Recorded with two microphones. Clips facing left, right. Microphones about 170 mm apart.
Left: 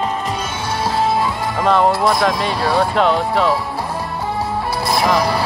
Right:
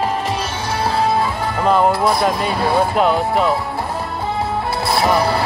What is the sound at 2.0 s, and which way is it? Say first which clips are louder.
Speech: even; 5° right (ahead or behind).